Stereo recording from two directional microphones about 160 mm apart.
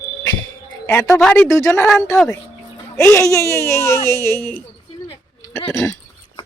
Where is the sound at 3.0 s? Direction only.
20° left (ahead or behind).